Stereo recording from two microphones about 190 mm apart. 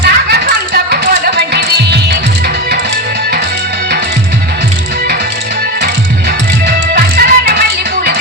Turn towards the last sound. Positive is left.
turn(degrees=-55)  # may be behind; listen again after turning